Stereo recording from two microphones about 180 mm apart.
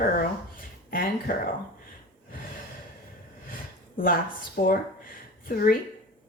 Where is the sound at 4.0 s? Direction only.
50° left (ahead or behind).